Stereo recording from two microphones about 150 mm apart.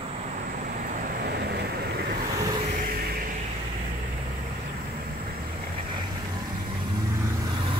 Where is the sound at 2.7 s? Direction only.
70° right (ahead or behind).